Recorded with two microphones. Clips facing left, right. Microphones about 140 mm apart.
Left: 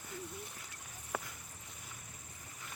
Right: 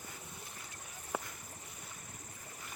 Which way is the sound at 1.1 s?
20° right (ahead or behind).